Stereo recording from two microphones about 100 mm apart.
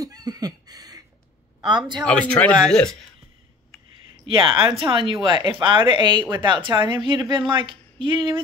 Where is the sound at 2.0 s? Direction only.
15° left (ahead or behind).